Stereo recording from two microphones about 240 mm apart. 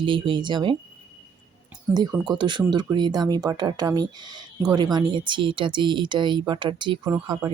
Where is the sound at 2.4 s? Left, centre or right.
Centre.